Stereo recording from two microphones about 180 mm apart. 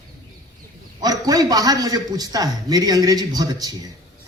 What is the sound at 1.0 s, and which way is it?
A man's voice, 20° right (ahead or behind).